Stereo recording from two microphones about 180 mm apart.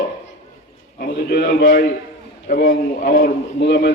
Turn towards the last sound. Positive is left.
turn(degrees=65)  # may be behind; listen again after turning